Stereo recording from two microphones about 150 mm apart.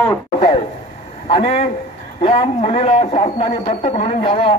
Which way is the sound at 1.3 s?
40° left (ahead or behind).